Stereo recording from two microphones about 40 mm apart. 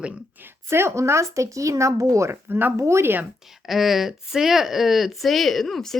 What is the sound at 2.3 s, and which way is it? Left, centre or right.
Speech, right.